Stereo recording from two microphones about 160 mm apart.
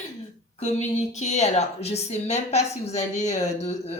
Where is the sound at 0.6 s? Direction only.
45° left (ahead or behind).